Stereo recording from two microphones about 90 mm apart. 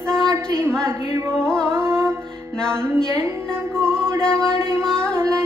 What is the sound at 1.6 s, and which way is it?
Music, 25° right (ahead or behind).